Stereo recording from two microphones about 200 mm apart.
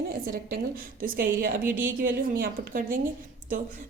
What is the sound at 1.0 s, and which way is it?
A woman's voice, 45° right (ahead or behind).